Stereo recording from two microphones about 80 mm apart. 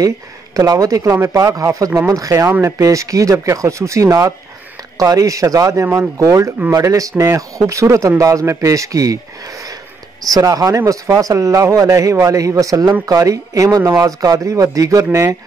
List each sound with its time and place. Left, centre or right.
0.6 s speech: right
10.2 s speech: right